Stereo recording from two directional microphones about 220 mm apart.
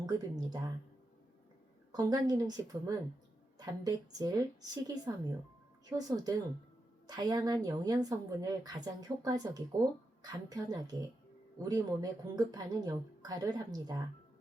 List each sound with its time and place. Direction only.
0.0 s a woman's voice: 15° right (ahead or behind)
1.9 s a woman's voice: 15° right (ahead or behind)